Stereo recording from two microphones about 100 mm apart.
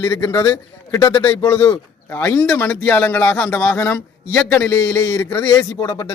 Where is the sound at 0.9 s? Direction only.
30° left (ahead or behind).